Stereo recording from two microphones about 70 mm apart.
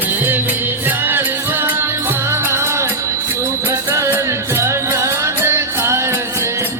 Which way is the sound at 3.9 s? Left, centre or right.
Right.